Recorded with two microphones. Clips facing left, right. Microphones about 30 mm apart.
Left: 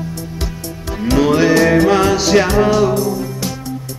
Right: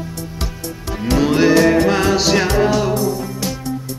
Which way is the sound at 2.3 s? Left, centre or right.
Centre.